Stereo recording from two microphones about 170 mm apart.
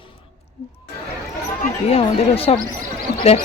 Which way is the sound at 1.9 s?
35° left (ahead or behind).